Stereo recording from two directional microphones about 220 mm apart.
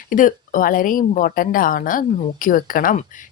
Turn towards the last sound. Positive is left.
turn(degrees=35)  # may be behind; listen again after turning